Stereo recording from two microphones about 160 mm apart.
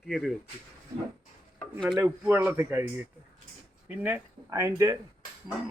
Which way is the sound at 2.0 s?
15° right (ahead or behind).